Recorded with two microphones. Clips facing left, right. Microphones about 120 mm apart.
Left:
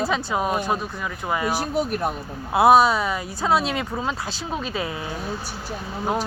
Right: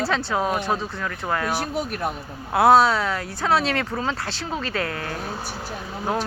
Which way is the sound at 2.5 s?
20° left (ahead or behind).